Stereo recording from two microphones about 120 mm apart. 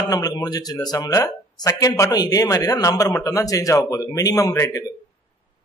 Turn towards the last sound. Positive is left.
turn(degrees=25)  # may be behind; listen again after turning